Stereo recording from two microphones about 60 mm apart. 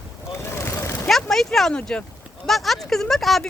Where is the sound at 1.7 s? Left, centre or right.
Centre.